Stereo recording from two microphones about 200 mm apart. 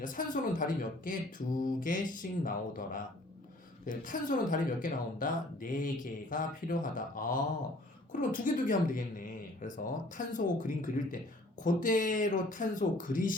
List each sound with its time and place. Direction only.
0.0 s speech: 40° left (ahead or behind)